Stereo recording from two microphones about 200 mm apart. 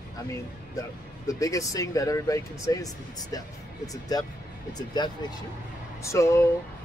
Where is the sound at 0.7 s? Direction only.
15° left (ahead or behind).